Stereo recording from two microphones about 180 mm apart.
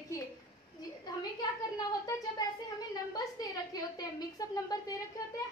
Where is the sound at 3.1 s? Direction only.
20° left (ahead or behind).